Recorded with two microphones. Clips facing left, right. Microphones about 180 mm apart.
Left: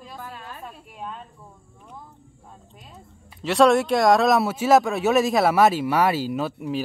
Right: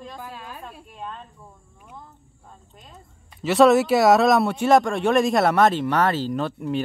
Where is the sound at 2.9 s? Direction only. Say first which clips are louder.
Left 1 dB; centre (ahead or behind).